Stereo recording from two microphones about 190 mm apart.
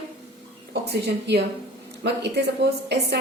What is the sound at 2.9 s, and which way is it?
Speech, 60° right (ahead or behind).